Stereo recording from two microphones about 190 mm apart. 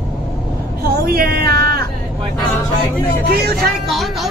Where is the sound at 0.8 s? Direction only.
50° right (ahead or behind).